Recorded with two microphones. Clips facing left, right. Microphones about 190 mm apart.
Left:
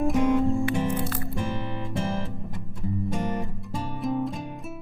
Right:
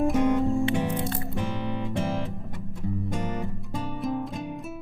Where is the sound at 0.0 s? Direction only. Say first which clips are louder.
Even; centre (ahead or behind).